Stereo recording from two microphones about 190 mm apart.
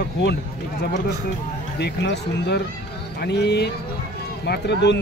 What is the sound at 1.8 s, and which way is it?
Speech, 65° left (ahead or behind).